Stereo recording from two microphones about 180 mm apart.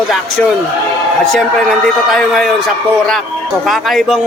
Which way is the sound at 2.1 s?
5° left (ahead or behind).